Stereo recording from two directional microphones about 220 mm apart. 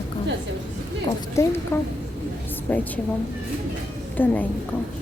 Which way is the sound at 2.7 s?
10° left (ahead or behind).